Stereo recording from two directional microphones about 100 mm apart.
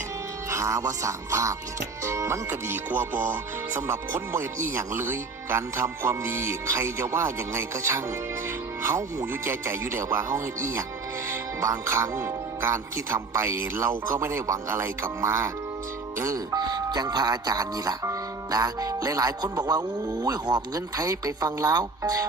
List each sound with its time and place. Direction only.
0.5 s speech: 30° right (ahead or behind)